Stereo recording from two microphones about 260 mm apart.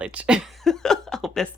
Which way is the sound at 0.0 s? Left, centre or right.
Centre.